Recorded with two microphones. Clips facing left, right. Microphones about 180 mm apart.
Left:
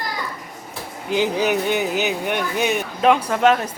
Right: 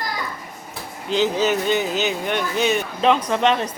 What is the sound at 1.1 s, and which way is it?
Speech, 10° left (ahead or behind).